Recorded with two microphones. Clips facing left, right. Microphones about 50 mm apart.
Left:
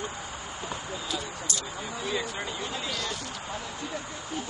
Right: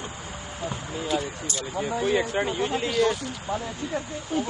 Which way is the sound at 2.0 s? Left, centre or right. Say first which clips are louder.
Right 8 dB; right.